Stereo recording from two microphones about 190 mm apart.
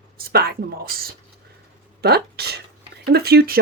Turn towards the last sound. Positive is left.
turn(degrees=-55)  # may be behind; listen again after turning